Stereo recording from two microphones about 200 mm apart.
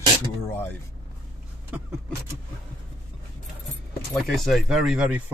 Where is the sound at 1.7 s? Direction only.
10° right (ahead or behind).